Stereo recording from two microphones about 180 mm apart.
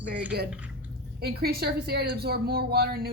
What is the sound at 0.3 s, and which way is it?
A woman's voice, 60° right (ahead or behind).